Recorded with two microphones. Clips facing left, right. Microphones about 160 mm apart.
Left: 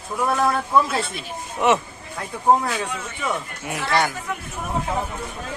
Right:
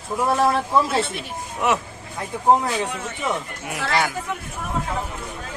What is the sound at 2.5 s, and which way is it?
Speech, 20° right (ahead or behind).